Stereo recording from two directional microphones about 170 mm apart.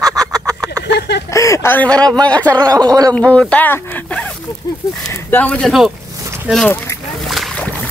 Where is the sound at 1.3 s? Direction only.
15° left (ahead or behind).